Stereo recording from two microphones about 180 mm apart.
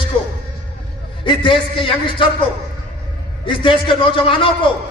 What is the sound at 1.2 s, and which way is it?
A man's voice, 30° left (ahead or behind).